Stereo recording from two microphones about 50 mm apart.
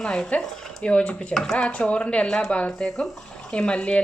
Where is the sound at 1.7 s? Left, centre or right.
Left; by 3.5 s centre.